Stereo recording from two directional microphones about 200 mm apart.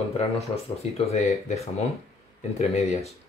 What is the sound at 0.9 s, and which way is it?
Speech, 30° left (ahead or behind).